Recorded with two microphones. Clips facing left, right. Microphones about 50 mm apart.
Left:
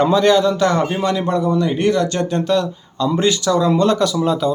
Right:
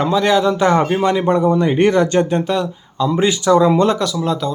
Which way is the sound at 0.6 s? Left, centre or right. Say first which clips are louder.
Right 3 dB; right.